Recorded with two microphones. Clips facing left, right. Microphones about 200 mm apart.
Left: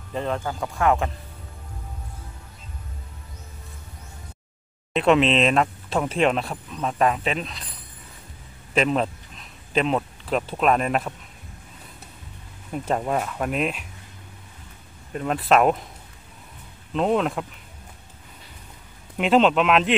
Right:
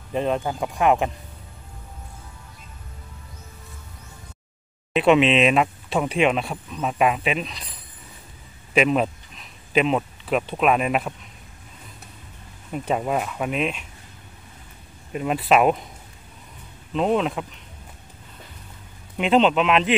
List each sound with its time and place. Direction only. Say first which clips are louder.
0.1 s speech: right 4 dB; 20° right (ahead or behind)
4.9 s speech: right 2 dB; 5° right (ahead or behind)
8.7 s speech: right 2 dB; 10° right (ahead or behind)
12.7 s speech: right 1 dB; 5° right (ahead or behind)
15.1 s speech: even; 5° right (ahead or behind)
16.9 s speech: even; centre (ahead or behind)
19.1 s speech: even; centre (ahead or behind)